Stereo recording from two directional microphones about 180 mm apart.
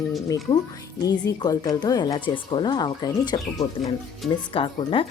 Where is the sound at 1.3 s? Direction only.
20° left (ahead or behind).